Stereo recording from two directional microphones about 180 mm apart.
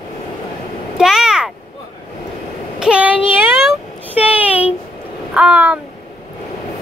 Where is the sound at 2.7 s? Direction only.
5° right (ahead or behind).